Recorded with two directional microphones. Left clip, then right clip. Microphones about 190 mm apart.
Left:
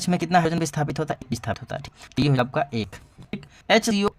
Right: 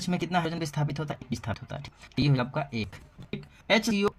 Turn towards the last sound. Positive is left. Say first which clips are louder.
# left 5 dB
turn(degrees=45)  # may be behind; listen again after turning